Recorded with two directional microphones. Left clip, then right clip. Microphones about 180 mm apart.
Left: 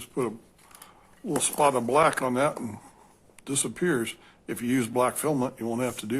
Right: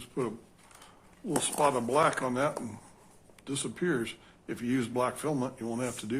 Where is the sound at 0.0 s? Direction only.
35° left (ahead or behind).